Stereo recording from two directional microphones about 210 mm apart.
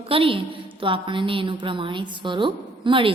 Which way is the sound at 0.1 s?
25° right (ahead or behind).